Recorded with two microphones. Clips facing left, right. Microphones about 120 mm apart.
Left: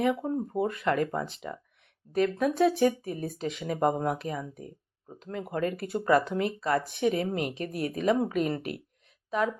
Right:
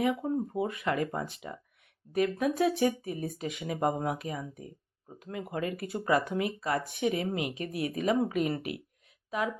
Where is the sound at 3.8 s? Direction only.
5° right (ahead or behind).